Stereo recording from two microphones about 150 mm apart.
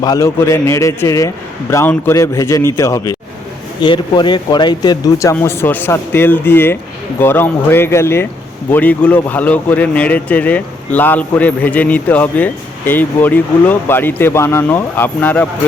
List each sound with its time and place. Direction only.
0.0 s a man's voice: 25° left (ahead or behind)